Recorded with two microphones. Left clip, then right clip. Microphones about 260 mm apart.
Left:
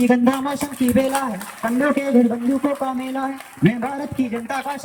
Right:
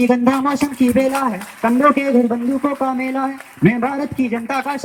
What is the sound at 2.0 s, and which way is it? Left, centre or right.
Speech, right.